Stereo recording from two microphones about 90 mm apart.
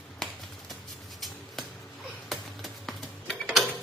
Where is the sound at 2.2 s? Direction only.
Centre (ahead or behind).